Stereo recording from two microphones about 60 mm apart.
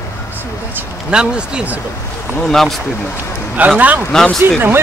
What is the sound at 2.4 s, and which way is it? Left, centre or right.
Speech, centre.